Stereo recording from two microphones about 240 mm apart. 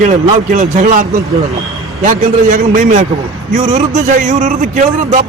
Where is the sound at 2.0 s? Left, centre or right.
Right.